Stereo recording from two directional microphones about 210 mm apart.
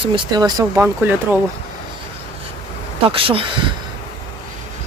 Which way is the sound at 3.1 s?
25° right (ahead or behind).